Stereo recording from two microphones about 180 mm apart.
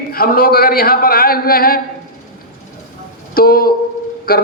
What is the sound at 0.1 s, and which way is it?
A man's voice, 55° left (ahead or behind).